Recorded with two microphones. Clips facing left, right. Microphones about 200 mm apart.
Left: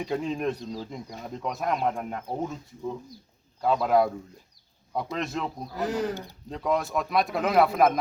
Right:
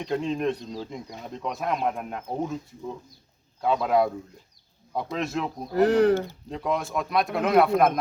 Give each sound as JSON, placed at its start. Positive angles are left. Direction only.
{"t": 0.0, "sound": "speech", "side_deg": 5}
{"t": 3.6, "sound": "speech", "side_deg": 0}
{"t": 5.7, "sound": "speech", "side_deg": -65}
{"t": 6.5, "sound": "speech", "side_deg": 0}